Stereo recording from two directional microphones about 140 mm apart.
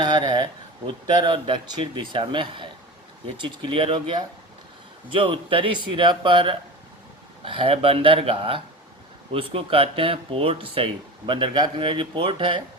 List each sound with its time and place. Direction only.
0.0 s speech: 30° right (ahead or behind)